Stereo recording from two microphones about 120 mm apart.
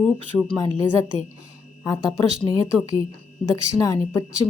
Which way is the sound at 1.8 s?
30° left (ahead or behind).